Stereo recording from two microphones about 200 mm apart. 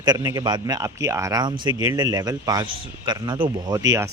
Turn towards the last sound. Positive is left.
turn(degrees=-15)  # may be behind; listen again after turning